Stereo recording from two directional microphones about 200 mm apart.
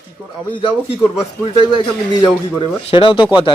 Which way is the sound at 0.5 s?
25° left (ahead or behind).